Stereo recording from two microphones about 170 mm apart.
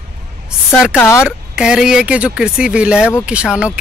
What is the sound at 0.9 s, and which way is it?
Speech, 15° left (ahead or behind).